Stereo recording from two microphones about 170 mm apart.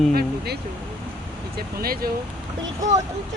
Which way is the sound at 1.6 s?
60° right (ahead or behind).